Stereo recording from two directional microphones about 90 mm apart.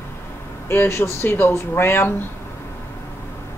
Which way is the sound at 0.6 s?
25° left (ahead or behind).